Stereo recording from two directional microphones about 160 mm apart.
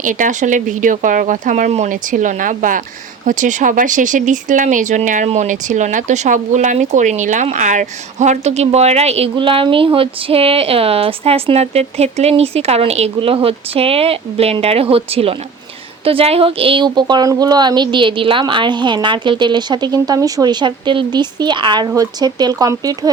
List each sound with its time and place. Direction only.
0.0 s a woman's voice: 55° right (ahead or behind); by 23.1 s 25° right (ahead or behind)